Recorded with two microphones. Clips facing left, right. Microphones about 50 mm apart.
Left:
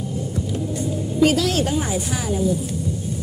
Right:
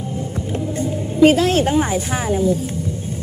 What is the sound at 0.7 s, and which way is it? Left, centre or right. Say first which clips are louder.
Speech: right 4 dB; right.